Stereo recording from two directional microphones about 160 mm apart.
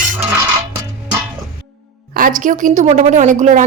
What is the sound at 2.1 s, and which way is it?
A woman's voice, 60° right (ahead or behind).